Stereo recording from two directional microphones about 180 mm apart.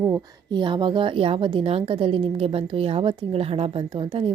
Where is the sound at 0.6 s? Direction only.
25° right (ahead or behind).